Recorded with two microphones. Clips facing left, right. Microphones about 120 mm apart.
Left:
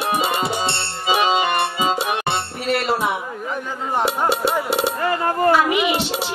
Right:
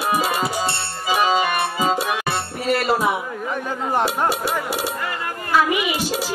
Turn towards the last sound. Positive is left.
turn(degrees=40)  # may be behind; listen again after turning